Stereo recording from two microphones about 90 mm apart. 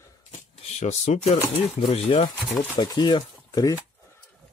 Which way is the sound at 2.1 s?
90° left.